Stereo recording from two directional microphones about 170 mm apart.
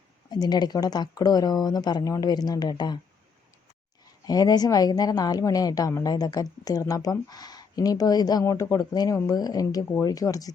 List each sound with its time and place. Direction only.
0.3 s a woman's voice: 25° left (ahead or behind)
4.3 s a woman's voice: 25° left (ahead or behind)